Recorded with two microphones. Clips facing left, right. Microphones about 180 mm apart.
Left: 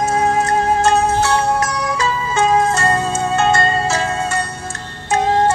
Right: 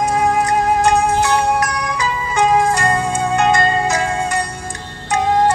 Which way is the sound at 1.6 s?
25° left (ahead or behind).